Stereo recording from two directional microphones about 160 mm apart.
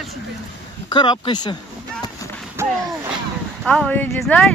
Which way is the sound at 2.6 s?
15° right (ahead or behind).